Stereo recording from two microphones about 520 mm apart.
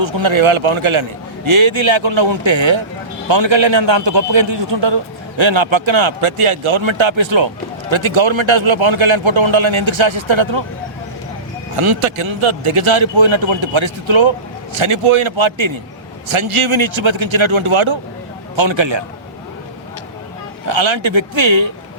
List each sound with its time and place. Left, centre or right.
0.0 s a man's voice: right
11.8 s a man's voice: right
20.7 s a man's voice: right